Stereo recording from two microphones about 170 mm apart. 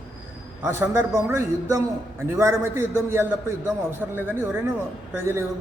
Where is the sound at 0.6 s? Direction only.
15° right (ahead or behind).